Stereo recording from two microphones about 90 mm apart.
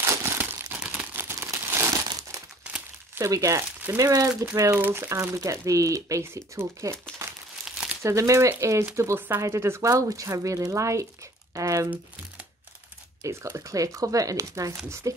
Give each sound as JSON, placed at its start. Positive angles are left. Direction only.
{"t": 0.0, "sound": "crumpling", "side_deg": -30}
{"t": 0.7, "sound": "a sound", "side_deg": -15}
{"t": 1.1, "sound": "crumpling", "side_deg": -25}
{"t": 2.0, "sound": "crumpling", "side_deg": -45}
{"t": 3.2, "sound": "speech", "side_deg": -35}
{"t": 4.7, "sound": "speech", "side_deg": -20}
{"t": 5.1, "sound": "speech", "side_deg": -35}
{"t": 7.2, "sound": "crumpling", "side_deg": -30}
{"t": 7.6, "sound": "crumpling", "side_deg": -5}
{"t": 8.0, "sound": "speech", "side_deg": -35}
{"t": 13.2, "sound": "speech", "side_deg": -35}